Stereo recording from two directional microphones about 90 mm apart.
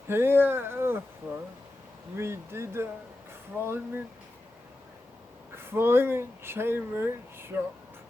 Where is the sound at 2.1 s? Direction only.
30° right (ahead or behind).